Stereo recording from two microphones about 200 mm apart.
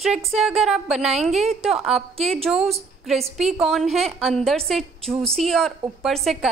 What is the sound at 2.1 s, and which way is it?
Speech, 30° right (ahead or behind).